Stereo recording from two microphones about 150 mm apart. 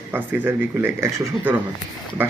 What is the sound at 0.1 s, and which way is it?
Speech, 10° right (ahead or behind).